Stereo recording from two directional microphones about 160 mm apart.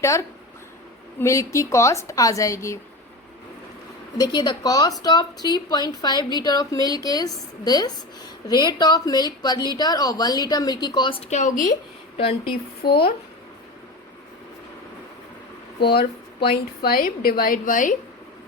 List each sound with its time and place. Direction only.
0.0 s a woman's voice: 20° left (ahead or behind)
4.2 s a woman's voice: 25° left (ahead or behind); by 11.7 s 55° left (ahead or behind)
12.1 s a woman's voice: 40° left (ahead or behind)
15.8 s a woman's voice: 85° left; by 17.9 s 55° left (ahead or behind)